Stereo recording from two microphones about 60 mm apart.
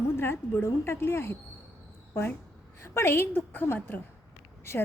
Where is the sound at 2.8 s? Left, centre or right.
Left.